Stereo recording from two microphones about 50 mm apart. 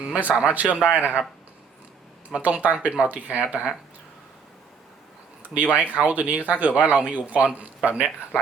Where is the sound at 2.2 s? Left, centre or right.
Right.